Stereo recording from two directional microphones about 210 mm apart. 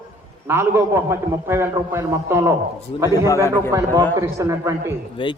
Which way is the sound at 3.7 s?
15° right (ahead or behind).